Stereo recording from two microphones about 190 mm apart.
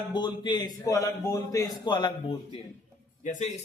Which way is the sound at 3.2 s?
40° left (ahead or behind).